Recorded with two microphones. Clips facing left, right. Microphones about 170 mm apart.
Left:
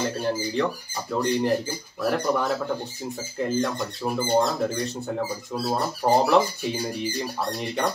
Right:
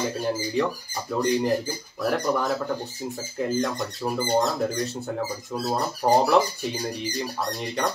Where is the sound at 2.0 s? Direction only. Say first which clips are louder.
Even; centre (ahead or behind).